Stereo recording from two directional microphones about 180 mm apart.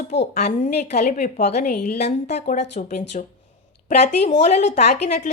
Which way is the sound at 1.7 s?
65° left (ahead or behind).